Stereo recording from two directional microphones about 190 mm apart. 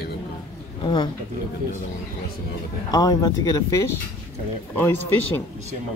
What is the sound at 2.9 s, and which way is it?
Speech, 20° left (ahead or behind).